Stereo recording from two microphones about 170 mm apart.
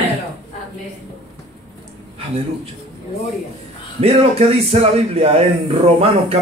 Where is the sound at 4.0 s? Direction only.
35° right (ahead or behind).